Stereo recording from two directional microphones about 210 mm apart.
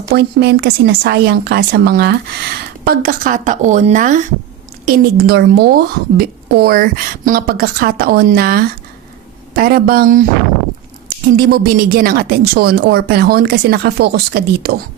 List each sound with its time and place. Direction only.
0.1 s a woman's voice: 50° right (ahead or behind)
4.9 s a woman's voice: 50° right (ahead or behind)
11.3 s a woman's voice: 45° right (ahead or behind)